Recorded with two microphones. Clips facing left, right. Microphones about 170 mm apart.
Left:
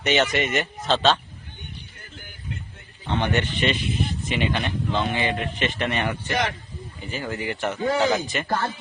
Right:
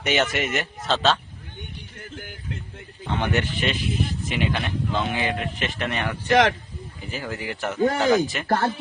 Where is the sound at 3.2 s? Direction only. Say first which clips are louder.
Left 1 dB; 5° right (ahead or behind).